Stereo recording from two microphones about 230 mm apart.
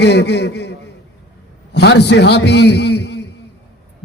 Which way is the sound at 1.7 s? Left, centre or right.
Left.